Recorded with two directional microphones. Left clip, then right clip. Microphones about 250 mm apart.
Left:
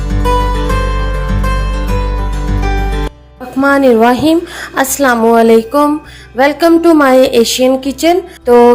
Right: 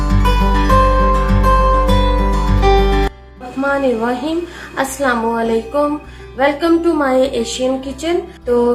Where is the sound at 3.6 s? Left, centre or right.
Left.